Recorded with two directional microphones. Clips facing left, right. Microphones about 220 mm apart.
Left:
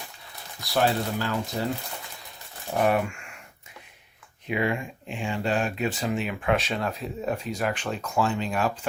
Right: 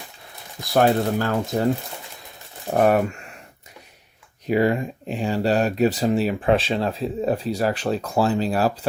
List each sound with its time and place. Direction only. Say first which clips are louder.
0.7 s speech: right 6 dB; 45° right (ahead or behind)
2.7 s speech: right 5 dB; 45° right (ahead or behind)
4.4 s speech: right 7 dB; 40° right (ahead or behind)